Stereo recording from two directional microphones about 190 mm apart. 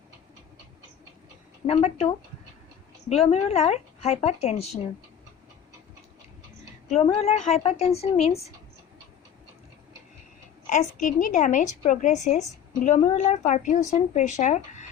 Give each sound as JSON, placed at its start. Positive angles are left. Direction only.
{"t": 1.6, "sound": "a woman's voice", "side_deg": 35}
{"t": 6.8, "sound": "a woman's voice", "side_deg": 30}
{"t": 10.7, "sound": "a woman's voice", "side_deg": 40}